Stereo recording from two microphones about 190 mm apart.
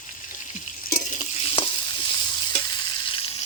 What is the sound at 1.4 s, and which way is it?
Stir, 25° left (ahead or behind).